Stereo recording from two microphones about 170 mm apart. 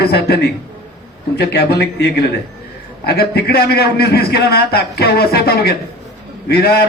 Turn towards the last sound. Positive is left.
turn(degrees=65)  # may be behind; listen again after turning